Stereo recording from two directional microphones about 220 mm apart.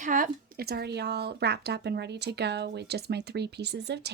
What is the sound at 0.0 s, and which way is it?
Speech, 35° right (ahead or behind).